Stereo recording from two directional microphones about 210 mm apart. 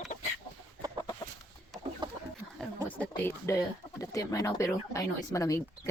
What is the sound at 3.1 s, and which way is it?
Speech, 15° left (ahead or behind).